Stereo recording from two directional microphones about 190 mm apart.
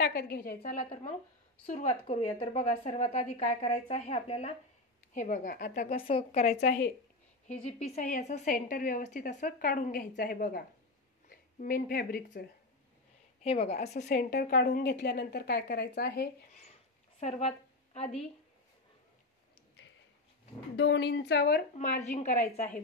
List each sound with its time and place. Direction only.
0.0 s a woman's voice: 60° left (ahead or behind)
1.7 s a woman's voice: 35° left (ahead or behind); by 5.9 s 50° left (ahead or behind)
5.9 s a woman's voice: 30° left (ahead or behind)
6.6 s a woman's voice: 55° left (ahead or behind)
7.6 s a woman's voice: 35° left (ahead or behind); by 12.4 s 50° left (ahead or behind)
13.4 s a woman's voice: 30° left (ahead or behind)
14.0 s a woman's voice: 55° left (ahead or behind)
17.2 s a woman's voice: 35° left (ahead or behind)
20.7 s a woman's voice: 65° left (ahead or behind)
21.7 s a woman's voice: 40° left (ahead or behind)